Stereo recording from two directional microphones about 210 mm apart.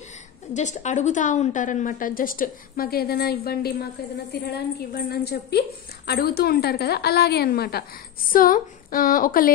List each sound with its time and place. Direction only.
0.6 s a woman's voice: 35° left (ahead or behind)